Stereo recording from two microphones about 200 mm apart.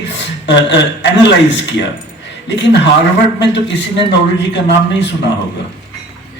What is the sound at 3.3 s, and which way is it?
A man's voice, 60° left (ahead or behind).